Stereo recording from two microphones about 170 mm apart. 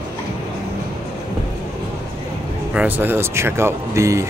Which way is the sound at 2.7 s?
10° right (ahead or behind).